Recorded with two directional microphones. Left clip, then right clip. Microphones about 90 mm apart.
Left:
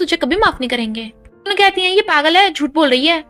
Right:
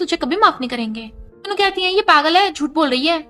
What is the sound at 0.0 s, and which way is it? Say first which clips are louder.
A woman's voice: left 1 dB; 30° left (ahead or behind).